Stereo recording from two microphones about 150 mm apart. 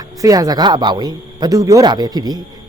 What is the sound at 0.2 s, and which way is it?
A man's voice, 25° right (ahead or behind).